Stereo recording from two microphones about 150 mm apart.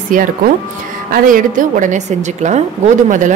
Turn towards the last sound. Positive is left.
turn(degrees=-55)  # may be behind; listen again after turning